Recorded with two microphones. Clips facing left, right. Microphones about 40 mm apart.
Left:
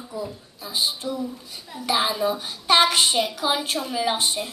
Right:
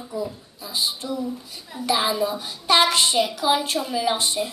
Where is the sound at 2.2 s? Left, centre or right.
Centre.